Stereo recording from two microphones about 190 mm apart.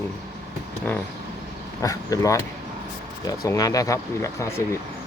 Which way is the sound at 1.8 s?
15° left (ahead or behind).